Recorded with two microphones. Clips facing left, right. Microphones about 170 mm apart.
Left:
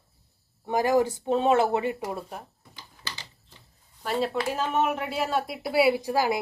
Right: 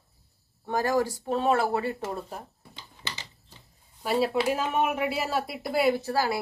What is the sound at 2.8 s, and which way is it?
Typing, 20° right (ahead or behind).